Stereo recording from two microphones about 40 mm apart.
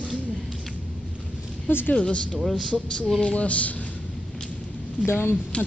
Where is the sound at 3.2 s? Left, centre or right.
Left.